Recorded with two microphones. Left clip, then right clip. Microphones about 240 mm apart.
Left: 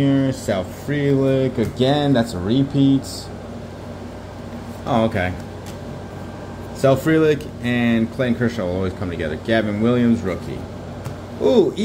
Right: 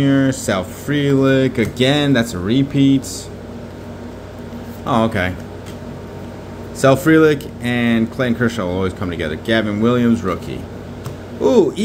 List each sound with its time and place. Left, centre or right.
0.0 s speech: centre
4.8 s speech: centre
6.8 s speech: centre
11.4 s speech: centre